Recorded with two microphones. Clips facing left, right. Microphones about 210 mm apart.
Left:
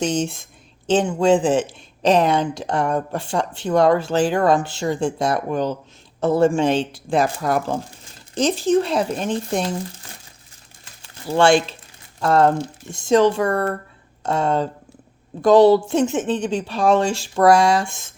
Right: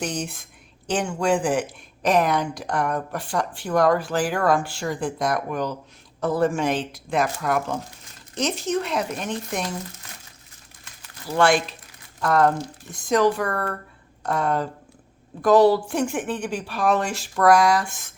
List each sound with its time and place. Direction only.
0.0 s speech: 25° left (ahead or behind)